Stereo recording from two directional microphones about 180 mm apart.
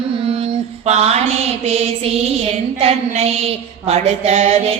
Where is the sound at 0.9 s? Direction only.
35° right (ahead or behind).